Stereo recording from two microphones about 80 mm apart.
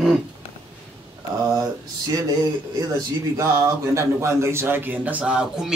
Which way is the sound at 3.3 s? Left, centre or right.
Right.